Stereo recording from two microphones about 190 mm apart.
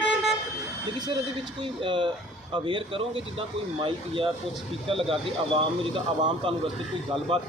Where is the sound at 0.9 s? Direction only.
20° right (ahead or behind).